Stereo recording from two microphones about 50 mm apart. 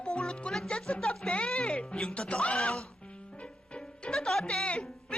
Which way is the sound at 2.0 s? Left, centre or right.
Centre.